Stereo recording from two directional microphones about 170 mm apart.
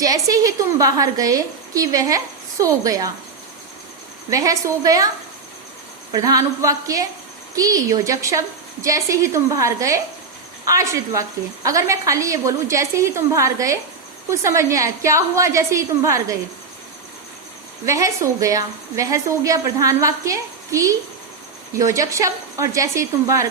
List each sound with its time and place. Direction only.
0.0 s a woman's voice: 20° right (ahead or behind)
4.3 s a woman's voice: 20° right (ahead or behind)
17.8 s a woman's voice: 20° right (ahead or behind)